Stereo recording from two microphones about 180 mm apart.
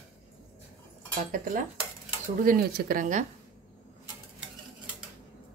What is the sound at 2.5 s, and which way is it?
Speech, 55° right (ahead or behind).